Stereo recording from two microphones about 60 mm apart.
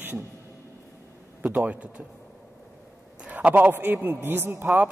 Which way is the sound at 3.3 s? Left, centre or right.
Right.